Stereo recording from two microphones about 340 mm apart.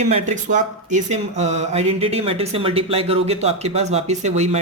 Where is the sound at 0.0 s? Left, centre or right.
Centre.